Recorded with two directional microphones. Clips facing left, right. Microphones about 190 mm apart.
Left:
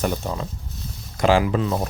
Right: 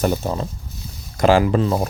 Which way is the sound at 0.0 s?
40° right (ahead or behind).